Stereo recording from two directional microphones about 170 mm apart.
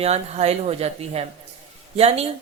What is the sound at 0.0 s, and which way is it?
A woman's voice, 40° right (ahead or behind).